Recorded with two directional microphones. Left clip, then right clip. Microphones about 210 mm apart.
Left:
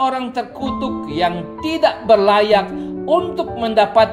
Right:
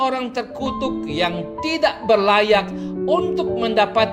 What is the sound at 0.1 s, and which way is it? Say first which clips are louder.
Speech: left 2 dB; 20° right (ahead or behind).